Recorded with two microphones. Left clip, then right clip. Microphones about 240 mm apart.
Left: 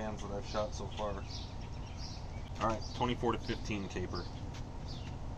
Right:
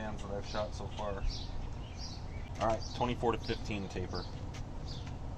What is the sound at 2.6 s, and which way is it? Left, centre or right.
Speech, centre.